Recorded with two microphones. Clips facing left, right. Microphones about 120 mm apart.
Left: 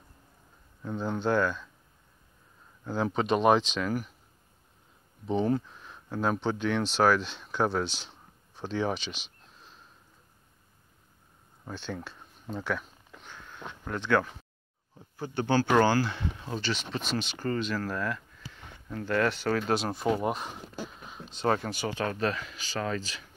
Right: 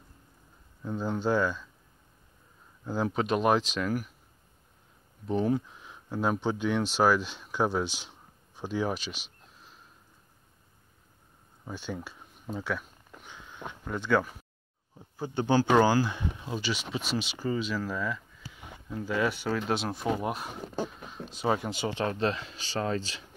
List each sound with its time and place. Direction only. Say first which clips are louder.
0.8 s speech: even; 5° right (ahead or behind)
2.8 s speech: even; 5° right (ahead or behind)
5.2 s speech: even; centre (ahead or behind)
11.6 s a sound: even; 10° right (ahead or behind)
15.0 s speech: right 1 dB; 15° right (ahead or behind)
21.6 s speech: right 1 dB; 20° right (ahead or behind)